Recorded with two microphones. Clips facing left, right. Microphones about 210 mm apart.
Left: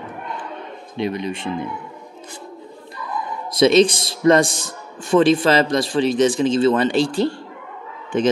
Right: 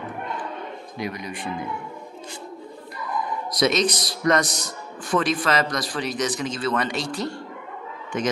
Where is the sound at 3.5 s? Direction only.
25° left (ahead or behind).